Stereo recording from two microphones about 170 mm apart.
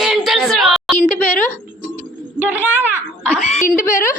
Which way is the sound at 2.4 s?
10° right (ahead or behind).